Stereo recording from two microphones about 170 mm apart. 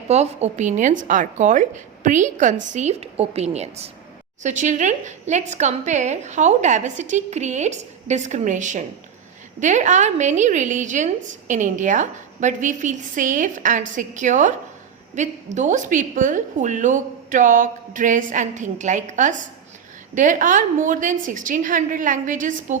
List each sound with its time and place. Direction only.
0.1 s a woman's voice: 40° right (ahead or behind)